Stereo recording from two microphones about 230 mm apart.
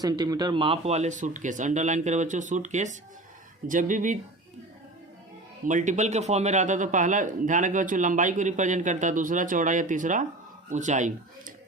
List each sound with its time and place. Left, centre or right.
0.0 s a man's voice: centre; by 4.2 s right
5.6 s a man's voice: right